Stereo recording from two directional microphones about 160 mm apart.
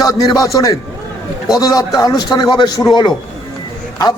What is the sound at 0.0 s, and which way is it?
A man's voice, 20° left (ahead or behind).